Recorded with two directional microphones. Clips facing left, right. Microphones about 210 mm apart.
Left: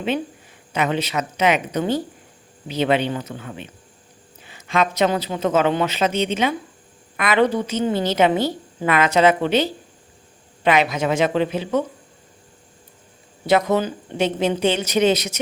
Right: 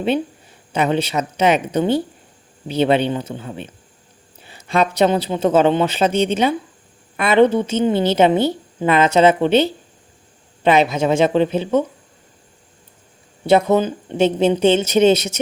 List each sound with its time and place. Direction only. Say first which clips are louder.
0.7 s a woman's voice: right 4 dB; 30° right (ahead or behind)
13.4 s a woman's voice: right 4 dB; 25° right (ahead or behind)